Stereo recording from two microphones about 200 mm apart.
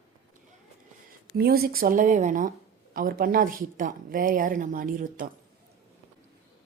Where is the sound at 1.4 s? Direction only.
50° right (ahead or behind).